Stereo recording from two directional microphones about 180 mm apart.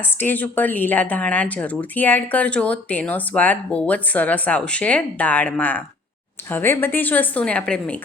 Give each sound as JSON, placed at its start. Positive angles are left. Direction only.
{"t": 0.2, "sound": "speech", "side_deg": 10}